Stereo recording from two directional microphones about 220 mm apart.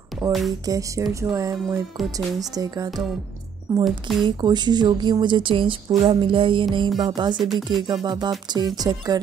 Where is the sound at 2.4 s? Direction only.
15° right (ahead or behind).